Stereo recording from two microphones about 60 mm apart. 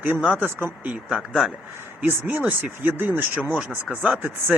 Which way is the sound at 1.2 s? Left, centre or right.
Centre.